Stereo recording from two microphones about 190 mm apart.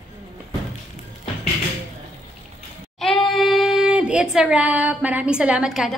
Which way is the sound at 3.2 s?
Centre (ahead or behind).